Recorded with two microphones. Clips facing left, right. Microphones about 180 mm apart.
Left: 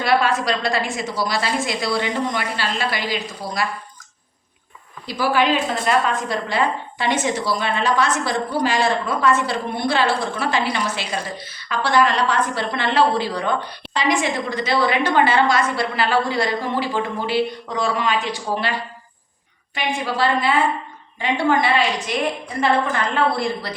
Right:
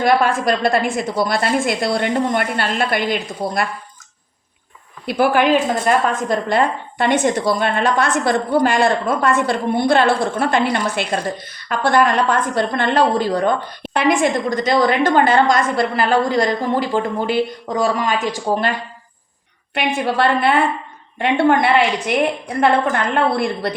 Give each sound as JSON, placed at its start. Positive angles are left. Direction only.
{"t": 0.0, "sound": "a woman's voice", "side_deg": -50}
{"t": 5.0, "sound": "a woman's voice", "side_deg": -55}
{"t": 19.7, "sound": "a woman's voice", "side_deg": -60}